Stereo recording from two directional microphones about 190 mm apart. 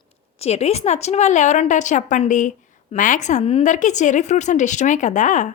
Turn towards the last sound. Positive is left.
turn(degrees=40)  # may be behind; listen again after turning